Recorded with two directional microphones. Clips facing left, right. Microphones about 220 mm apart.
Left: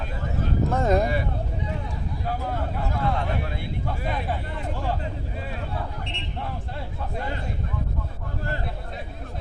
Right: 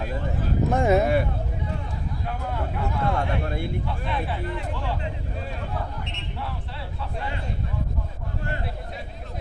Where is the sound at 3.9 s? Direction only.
45° left (ahead or behind).